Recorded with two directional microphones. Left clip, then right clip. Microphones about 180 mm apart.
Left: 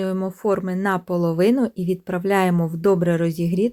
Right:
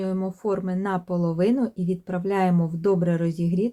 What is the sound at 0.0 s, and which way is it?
Speech, 30° left (ahead or behind).